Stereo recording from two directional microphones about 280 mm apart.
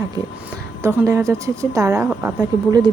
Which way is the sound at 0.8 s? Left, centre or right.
Centre.